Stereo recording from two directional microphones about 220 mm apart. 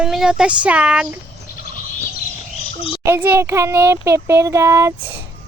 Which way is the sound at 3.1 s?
10° right (ahead or behind).